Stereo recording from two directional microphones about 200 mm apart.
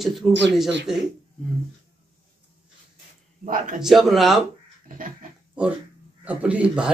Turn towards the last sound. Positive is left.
turn(degrees=-5)  # may be behind; listen again after turning